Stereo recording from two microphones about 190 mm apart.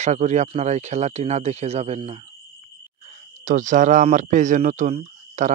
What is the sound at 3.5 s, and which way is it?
Speech, 40° right (ahead or behind).